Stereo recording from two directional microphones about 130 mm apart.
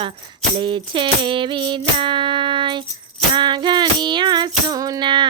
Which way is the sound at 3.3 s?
35° right (ahead or behind).